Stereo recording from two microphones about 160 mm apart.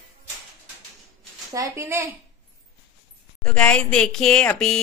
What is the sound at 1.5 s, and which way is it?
Speech, 15° right (ahead or behind).